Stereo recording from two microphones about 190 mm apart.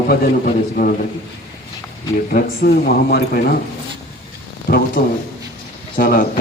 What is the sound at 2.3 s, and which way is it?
Speech, 50° left (ahead or behind).